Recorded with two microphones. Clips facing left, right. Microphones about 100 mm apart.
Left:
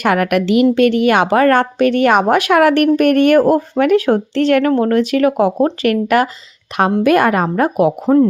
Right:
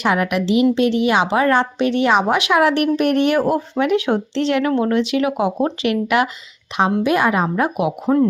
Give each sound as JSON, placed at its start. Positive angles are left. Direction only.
{"t": 0.0, "sound": "a woman's voice", "side_deg": 55}